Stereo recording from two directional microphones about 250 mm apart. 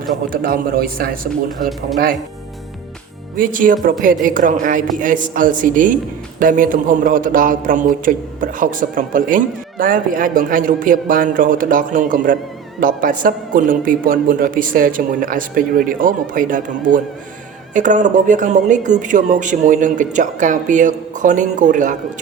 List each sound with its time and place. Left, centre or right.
0.3 s a man's voice: right
3.3 s a man's voice: right